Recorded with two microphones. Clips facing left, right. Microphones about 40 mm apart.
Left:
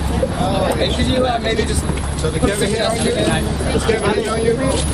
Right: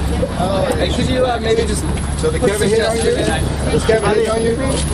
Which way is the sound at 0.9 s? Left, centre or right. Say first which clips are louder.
Right 1 dB; centre.